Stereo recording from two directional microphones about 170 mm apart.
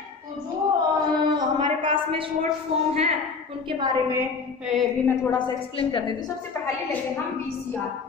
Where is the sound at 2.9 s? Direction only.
35° right (ahead or behind).